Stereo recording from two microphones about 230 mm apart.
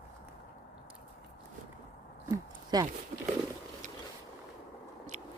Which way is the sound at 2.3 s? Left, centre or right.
Centre.